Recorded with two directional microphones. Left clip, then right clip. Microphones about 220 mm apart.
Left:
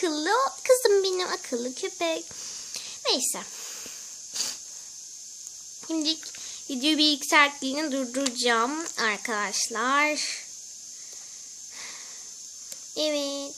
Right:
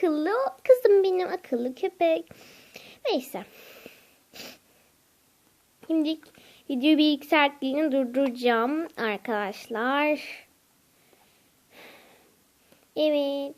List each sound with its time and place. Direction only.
0.0 s a sound: 5° left (ahead or behind)
5.9 s speech: 5° left (ahead or behind)
12.9 s speech: 5° right (ahead or behind)